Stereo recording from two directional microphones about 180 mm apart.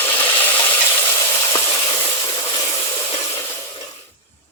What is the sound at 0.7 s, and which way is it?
Stir, 15° left (ahead or behind).